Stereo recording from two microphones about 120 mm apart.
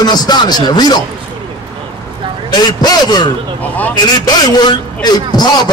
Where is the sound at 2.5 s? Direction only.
35° left (ahead or behind).